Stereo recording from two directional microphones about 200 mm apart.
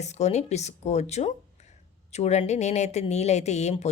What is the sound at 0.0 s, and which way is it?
Speech, 35° left (ahead or behind).